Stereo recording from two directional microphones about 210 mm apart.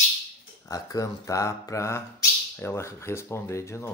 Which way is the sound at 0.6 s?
15° left (ahead or behind).